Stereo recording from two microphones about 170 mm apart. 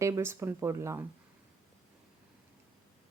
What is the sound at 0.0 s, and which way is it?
A woman's voice, 15° right (ahead or behind).